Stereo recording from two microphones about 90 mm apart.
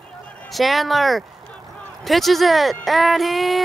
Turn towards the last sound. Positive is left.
turn(degrees=0)  # may be behind; listen again after turning